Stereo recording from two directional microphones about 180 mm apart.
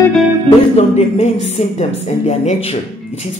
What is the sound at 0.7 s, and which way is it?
Speech, 35° left (ahead or behind).